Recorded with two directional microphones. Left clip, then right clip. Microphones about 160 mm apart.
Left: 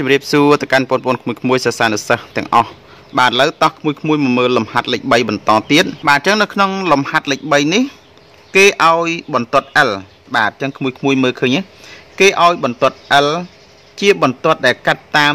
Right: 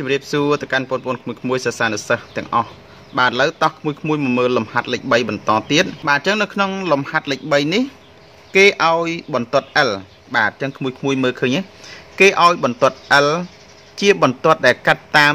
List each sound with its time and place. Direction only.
0.0 s speech: 40° left (ahead or behind)
3.2 s a man's voice: 30° left (ahead or behind)